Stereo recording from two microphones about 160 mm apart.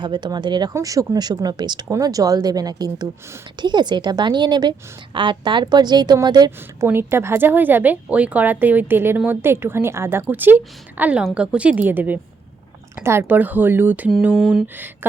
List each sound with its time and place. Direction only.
0.0 s speech: 25° right (ahead or behind)
6.8 s a woman's voice: 15° right (ahead or behind)
14.1 s mantra: 5° right (ahead or behind)